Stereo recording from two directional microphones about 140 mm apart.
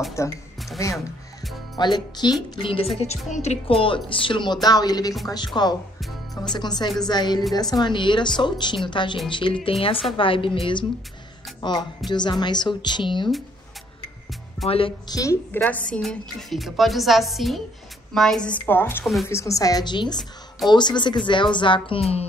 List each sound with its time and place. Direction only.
0.2 s a woman's voice: 20° left (ahead or behind)
1.8 s a woman's voice: 30° left (ahead or behind)
3.0 s a woman's voice: 55° left (ahead or behind)
3.6 s a woman's voice: 40° left (ahead or behind)
14.6 s speech: centre (ahead or behind)
15.0 s a woman's voice: 25° left (ahead or behind)
15.5 s a woman's voice: 10° left (ahead or behind); by 20.2 s 30° left (ahead or behind)
20.2 s a woman's voice: centre (ahead or behind)
20.7 s a woman's voice: 30° left (ahead or behind)